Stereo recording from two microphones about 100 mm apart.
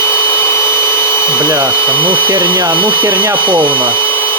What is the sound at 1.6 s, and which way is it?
Speech, 25° left (ahead or behind).